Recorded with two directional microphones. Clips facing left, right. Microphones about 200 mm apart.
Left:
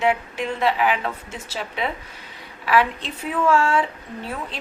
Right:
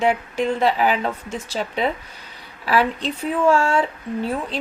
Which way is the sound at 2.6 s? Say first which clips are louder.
Even; 35° right (ahead or behind).